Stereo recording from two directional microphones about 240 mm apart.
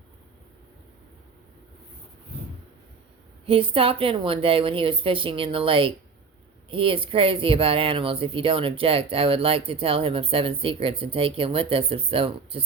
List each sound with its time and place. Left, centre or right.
3.4 s speech: right